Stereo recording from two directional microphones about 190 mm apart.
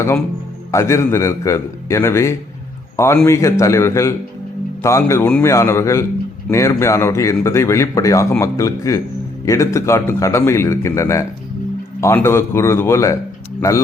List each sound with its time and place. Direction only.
0.7 s a man's voice: 15° left (ahead or behind)